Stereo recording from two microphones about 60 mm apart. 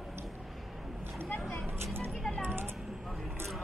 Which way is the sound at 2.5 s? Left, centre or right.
Right.